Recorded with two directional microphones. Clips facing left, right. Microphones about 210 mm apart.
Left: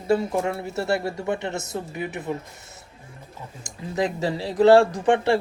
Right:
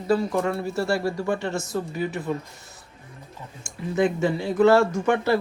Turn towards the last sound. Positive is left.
turn(degrees=30)  # may be behind; listen again after turning